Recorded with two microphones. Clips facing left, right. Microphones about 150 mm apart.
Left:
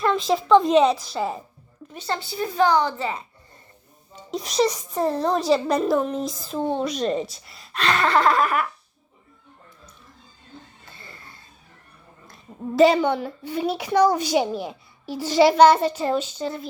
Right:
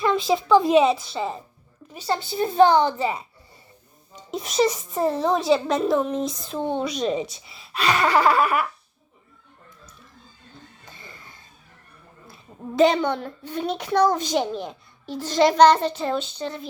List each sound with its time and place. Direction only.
0.0 s a child's voice: centre (ahead or behind)
1.9 s a woman's voice: 10° right (ahead or behind)
2.1 s a child's voice: 20° right (ahead or behind)
3.0 s a child's voice: 10° right (ahead or behind)
4.3 s a child's voice: centre (ahead or behind)
12.3 s a child's voice: centre (ahead or behind)